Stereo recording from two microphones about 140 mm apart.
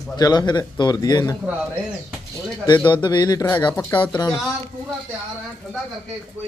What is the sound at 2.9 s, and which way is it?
Speech, 35° left (ahead or behind).